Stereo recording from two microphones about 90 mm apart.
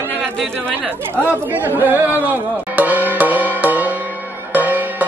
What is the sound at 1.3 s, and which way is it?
Speech, 20° right (ahead or behind).